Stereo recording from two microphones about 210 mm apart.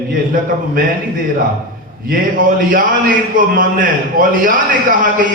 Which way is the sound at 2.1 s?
40° right (ahead or behind).